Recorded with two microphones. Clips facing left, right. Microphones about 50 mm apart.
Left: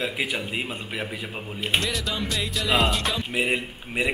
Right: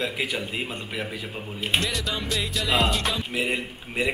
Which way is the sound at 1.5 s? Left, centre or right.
Centre.